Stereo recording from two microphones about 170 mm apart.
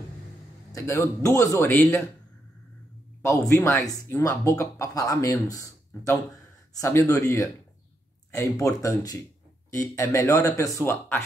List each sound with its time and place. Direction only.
0.7 s speech: 15° left (ahead or behind)
3.3 s speech: 15° left (ahead or behind)